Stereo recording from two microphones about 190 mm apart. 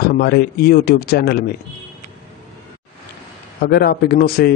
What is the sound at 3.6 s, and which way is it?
Speech, 55° left (ahead or behind).